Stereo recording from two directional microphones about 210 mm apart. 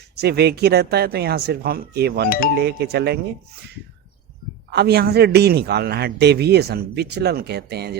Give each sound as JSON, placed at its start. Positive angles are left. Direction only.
{"t": 0.2, "sound": "speech", "side_deg": -50}
{"t": 4.7, "sound": "speech", "side_deg": -50}